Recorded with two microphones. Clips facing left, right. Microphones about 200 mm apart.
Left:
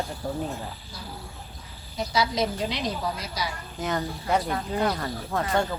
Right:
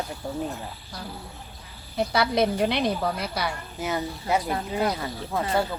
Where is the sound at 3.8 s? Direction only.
5° right (ahead or behind).